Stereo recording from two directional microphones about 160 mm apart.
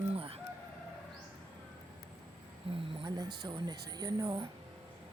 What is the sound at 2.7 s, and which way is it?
Speech, 35° right (ahead or behind).